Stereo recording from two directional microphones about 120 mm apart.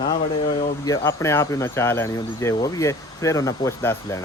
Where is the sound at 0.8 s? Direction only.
25° left (ahead or behind).